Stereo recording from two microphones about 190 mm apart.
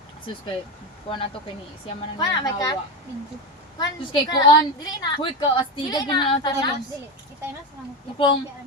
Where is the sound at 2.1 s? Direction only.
20° left (ahead or behind).